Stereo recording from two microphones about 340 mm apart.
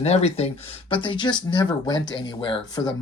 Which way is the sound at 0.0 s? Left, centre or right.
Centre.